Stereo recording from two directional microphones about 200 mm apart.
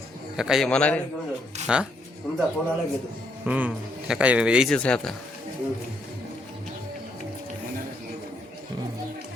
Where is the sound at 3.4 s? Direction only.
5° right (ahead or behind).